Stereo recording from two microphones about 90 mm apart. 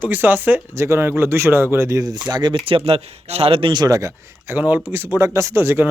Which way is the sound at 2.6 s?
90° right.